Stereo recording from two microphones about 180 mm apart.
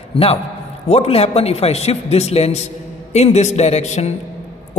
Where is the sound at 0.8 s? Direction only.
35° left (ahead or behind).